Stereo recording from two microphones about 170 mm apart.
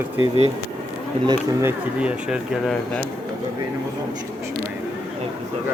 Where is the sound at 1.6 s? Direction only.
5° right (ahead or behind).